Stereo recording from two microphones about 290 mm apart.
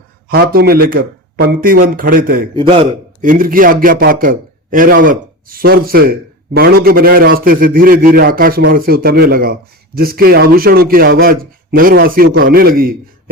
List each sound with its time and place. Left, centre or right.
0.3 s a man's voice: right
2.6 s a man's voice: centre